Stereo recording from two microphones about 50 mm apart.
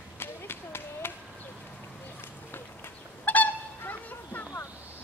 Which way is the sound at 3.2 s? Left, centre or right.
Left.